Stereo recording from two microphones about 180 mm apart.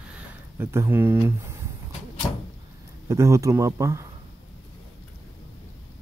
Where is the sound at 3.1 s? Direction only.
15° right (ahead or behind).